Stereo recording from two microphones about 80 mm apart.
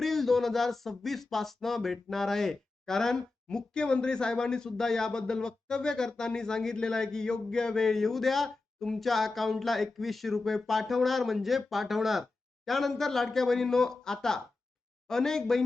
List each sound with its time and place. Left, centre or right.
0.0 s speech: centre